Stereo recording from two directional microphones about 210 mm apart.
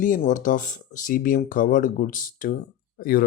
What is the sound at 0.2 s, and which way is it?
Speech, 35° left (ahead or behind).